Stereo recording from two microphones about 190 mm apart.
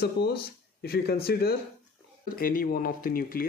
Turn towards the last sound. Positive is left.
turn(degrees=50)  # may be behind; listen again after turning